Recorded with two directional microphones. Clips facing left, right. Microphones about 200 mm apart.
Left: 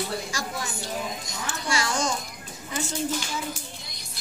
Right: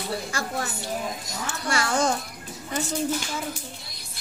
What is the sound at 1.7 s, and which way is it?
Speech, 60° right (ahead or behind).